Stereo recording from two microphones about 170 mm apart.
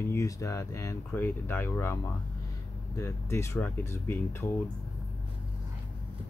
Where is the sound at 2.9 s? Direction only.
15° left (ahead or behind).